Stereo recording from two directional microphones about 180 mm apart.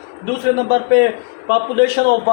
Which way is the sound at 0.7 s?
65° right (ahead or behind).